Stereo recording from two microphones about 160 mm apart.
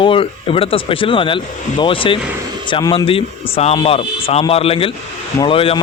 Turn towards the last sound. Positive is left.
turn(degrees=35)  # may be behind; listen again after turning